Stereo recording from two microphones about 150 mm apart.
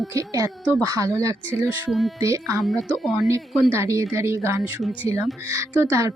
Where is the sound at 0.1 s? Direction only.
20° right (ahead or behind).